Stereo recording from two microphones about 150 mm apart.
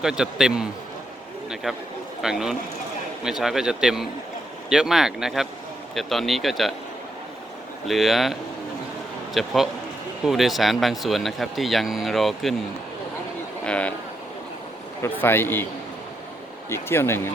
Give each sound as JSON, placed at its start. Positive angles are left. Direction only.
{"t": 0.0, "sound": "speech", "side_deg": -5}
{"t": 7.9, "sound": "speech", "side_deg": 0}
{"t": 13.7, "sound": "speech", "side_deg": 10}
{"t": 15.0, "sound": "speech", "side_deg": 15}
{"t": 16.6, "sound": "speech", "side_deg": 15}